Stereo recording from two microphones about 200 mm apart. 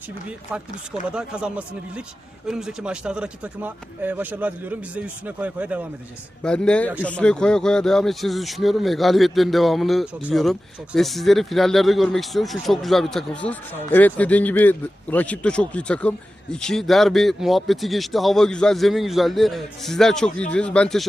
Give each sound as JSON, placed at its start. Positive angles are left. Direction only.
{"t": 1.1, "sound": "speech", "side_deg": -5}
{"t": 6.4, "sound": "speech", "side_deg": 5}